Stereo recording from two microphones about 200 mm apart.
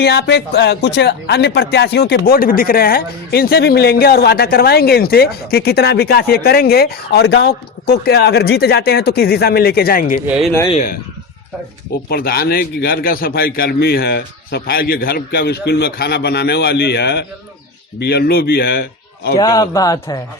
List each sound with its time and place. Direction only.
0.0 s speech: 55° left (ahead or behind)
10.2 s speech: 5° right (ahead or behind)
10.8 s speech: 45° left (ahead or behind)
12.0 s speech: 50° left (ahead or behind)
19.4 s speech: 20° left (ahead or behind)